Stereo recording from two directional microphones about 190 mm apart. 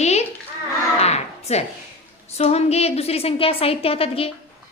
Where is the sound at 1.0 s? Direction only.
35° left (ahead or behind).